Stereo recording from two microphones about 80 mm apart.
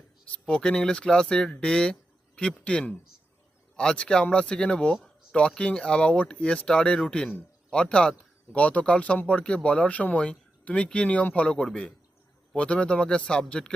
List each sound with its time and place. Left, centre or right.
0.3 s speech: centre